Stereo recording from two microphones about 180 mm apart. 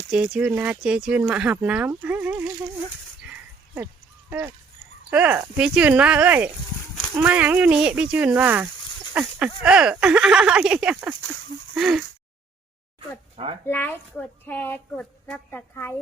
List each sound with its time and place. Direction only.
0.1 s speech: 5° right (ahead or behind)
4.3 s speech: 10° right (ahead or behind)
13.3 s speech: 30° right (ahead or behind)
13.7 s speech: 10° left (ahead or behind)